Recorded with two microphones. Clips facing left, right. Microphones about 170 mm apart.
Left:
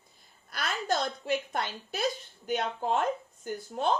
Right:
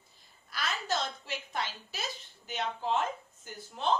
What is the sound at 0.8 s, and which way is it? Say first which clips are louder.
A woman's voice: left 8 dB; 50° left (ahead or behind).